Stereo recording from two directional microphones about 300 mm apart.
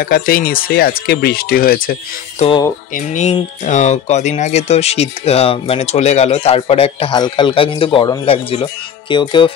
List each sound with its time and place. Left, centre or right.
0.0 s speech: left